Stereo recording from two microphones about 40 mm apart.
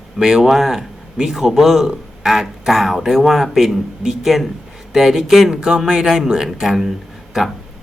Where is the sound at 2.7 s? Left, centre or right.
Centre.